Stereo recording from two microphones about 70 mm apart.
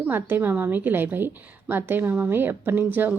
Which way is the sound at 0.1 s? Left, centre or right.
Right.